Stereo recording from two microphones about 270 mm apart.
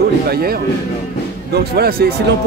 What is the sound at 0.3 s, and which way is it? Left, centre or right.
Speech, right.